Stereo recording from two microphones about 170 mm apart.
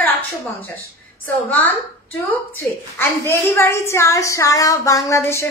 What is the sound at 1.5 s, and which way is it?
Speech, 10° left (ahead or behind).